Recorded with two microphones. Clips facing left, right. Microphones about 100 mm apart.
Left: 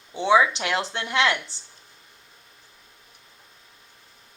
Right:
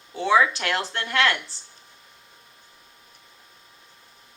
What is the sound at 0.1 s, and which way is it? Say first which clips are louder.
Speech: left 1 dB; 20° left (ahead or behind).